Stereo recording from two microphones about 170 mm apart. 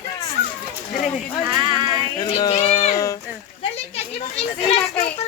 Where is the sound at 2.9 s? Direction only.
20° left (ahead or behind).